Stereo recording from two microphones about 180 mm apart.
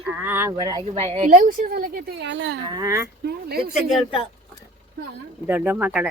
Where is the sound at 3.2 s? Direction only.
60° right (ahead or behind).